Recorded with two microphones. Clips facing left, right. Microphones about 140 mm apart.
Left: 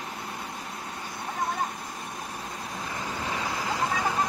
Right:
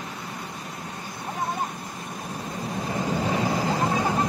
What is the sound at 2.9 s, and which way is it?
Vehicle, 90° right.